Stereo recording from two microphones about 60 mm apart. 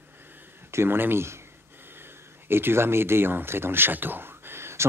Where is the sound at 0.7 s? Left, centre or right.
Right.